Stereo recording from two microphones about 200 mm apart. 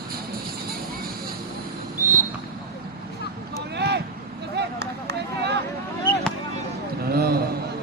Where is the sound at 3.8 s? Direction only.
55° right (ahead or behind).